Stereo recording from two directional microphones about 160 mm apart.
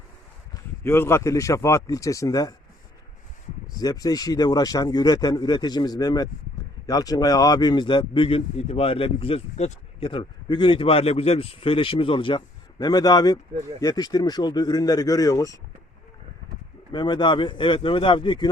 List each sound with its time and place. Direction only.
0.5 s speech: 15° left (ahead or behind)
3.8 s a man's voice: 25° left (ahead or behind)
16.9 s a man's voice: 25° left (ahead or behind)